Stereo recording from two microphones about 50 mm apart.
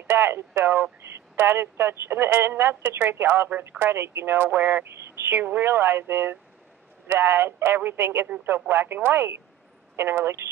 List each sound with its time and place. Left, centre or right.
0.0 s speech: right
5.0 s a sound: right
5.4 s speech: right